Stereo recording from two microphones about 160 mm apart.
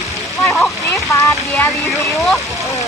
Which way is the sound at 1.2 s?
15° left (ahead or behind).